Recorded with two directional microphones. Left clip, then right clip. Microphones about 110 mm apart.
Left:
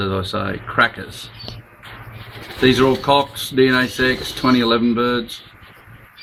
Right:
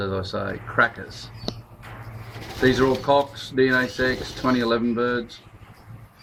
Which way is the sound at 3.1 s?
35° left (ahead or behind).